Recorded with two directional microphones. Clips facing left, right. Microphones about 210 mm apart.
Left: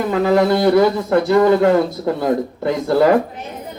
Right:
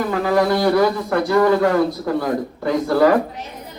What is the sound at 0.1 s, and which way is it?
A man's voice, 25° left (ahead or behind).